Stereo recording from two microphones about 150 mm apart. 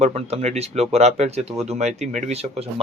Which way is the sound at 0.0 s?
45° right (ahead or behind).